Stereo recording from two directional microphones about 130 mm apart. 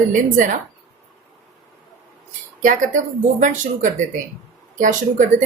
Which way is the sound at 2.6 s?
85° right.